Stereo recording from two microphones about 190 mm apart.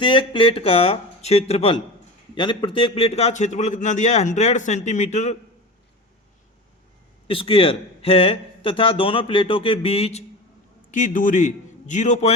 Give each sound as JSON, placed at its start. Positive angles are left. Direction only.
{"t": 0.0, "sound": "a man's voice", "side_deg": 25}
{"t": 7.3, "sound": "a man's voice", "side_deg": 30}
{"t": 10.9, "sound": "a man's voice", "side_deg": 45}